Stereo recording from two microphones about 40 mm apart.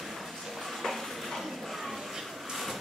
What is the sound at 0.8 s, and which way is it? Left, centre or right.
Dishes, centre.